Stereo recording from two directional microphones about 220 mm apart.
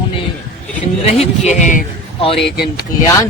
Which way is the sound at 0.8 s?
30° left (ahead or behind).